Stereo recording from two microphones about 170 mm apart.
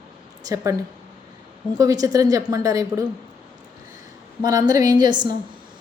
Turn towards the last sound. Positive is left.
turn(degrees=-25)  # may be behind; listen again after turning